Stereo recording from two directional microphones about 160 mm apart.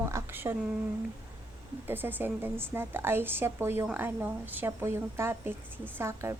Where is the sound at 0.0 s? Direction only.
15° right (ahead or behind).